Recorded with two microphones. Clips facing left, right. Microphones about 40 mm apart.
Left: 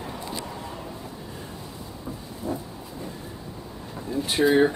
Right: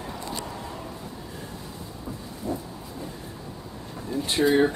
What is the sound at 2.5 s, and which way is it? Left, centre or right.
Train, centre.